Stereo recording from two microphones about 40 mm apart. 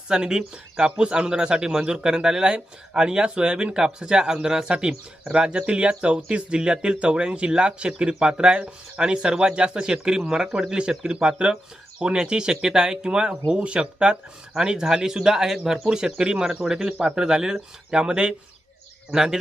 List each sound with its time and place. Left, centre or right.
0.1 s speech: centre